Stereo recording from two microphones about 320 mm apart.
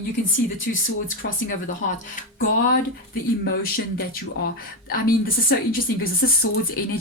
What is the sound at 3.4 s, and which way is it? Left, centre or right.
Speech, left.